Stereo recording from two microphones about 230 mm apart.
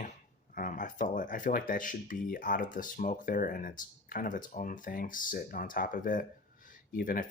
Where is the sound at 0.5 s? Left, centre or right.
Left.